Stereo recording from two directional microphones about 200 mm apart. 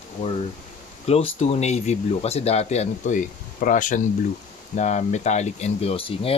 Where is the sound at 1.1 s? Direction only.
35° left (ahead or behind).